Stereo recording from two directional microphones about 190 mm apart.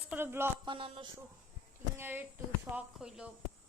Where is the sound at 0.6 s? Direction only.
25° right (ahead or behind).